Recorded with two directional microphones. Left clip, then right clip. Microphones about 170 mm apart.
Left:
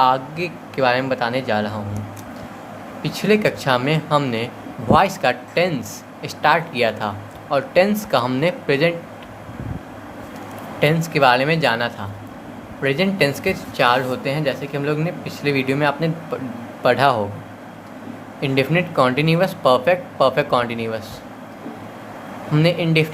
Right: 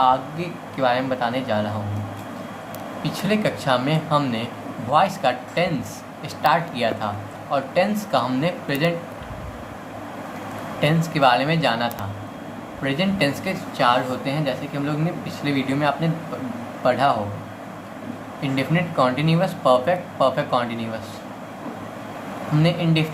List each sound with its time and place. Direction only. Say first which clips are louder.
0.8 s speech: left 3 dB; 50° left (ahead or behind)
3.0 s speech: left 5 dB; 50° left (ahead or behind)
10.8 s a man's voice: left 4 dB; 50° left (ahead or behind)
18.3 s speech: left 5 dB; 55° left (ahead or behind)
22.5 s speech: left 5 dB; 55° left (ahead or behind)